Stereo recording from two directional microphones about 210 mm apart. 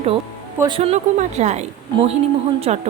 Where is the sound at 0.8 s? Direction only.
30° right (ahead or behind).